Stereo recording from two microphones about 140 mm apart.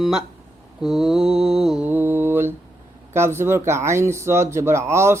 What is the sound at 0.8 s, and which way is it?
Mantra, centre (ahead or behind).